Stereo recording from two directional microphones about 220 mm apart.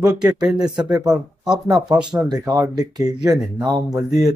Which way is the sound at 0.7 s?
20° right (ahead or behind).